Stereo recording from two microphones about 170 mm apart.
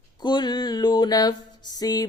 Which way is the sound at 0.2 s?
25° left (ahead or behind).